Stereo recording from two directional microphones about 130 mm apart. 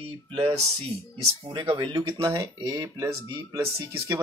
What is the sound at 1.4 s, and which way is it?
Speech, 35° right (ahead or behind).